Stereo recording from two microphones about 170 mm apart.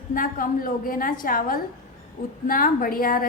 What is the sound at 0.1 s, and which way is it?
A woman's voice, 55° left (ahead or behind).